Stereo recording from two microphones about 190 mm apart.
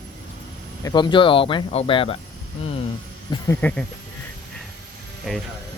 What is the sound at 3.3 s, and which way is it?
Speech, 10° left (ahead or behind).